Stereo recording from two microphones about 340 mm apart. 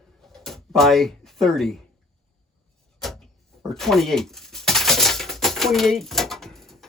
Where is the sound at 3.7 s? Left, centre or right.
Centre.